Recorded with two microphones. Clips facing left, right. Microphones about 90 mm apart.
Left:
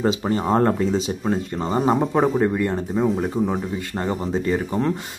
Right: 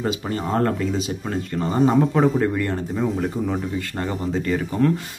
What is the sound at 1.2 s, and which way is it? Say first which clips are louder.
Speech: left 2 dB; 15° left (ahead or behind).